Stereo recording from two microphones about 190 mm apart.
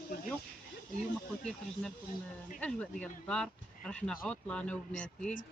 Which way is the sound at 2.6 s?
5° left (ahead or behind).